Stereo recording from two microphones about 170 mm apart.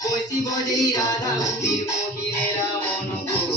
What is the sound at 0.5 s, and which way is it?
Music, 20° left (ahead or behind).